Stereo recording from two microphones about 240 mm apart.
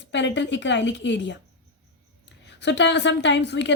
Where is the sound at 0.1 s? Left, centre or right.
Left.